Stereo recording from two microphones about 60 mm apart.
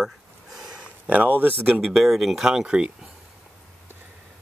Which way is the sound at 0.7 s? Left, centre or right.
Right.